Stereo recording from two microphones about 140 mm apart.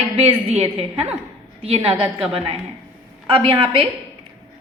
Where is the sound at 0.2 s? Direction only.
45° right (ahead or behind).